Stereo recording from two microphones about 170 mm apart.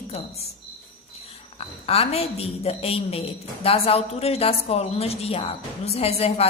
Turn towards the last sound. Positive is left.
turn(degrees=35)  # may be behind; listen again after turning